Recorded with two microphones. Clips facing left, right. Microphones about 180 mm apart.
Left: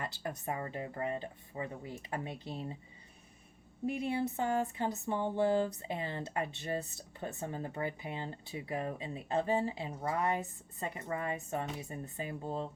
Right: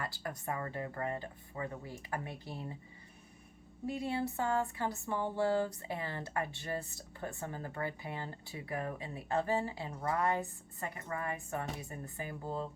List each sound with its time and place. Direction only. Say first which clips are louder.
0.0 s speech: left 1 dB; 20° left (ahead or behind)
3.8 s speech: left 2 dB; 20° left (ahead or behind)